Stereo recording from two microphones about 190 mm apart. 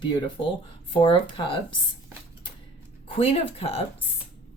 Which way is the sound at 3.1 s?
30° left (ahead or behind).